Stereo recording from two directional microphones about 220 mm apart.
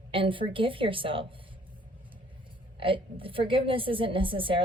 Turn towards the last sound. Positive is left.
turn(degrees=-25)  # may be behind; listen again after turning